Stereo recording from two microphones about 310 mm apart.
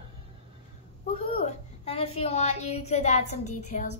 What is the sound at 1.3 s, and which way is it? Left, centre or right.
A woman's voice, centre.